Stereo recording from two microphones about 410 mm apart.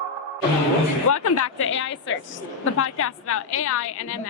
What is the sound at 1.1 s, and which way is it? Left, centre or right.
A woman's voice, left.